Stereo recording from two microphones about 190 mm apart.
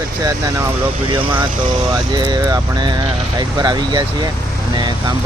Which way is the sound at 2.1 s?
20° right (ahead or behind).